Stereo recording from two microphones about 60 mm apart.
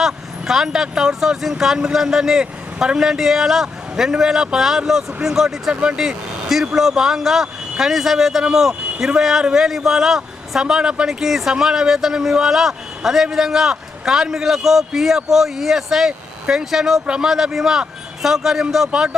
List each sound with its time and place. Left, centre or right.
0.0 s a man's voice: centre
18.9 s a man's voice: centre